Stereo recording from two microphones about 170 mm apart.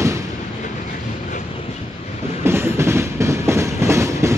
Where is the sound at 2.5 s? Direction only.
15° right (ahead or behind).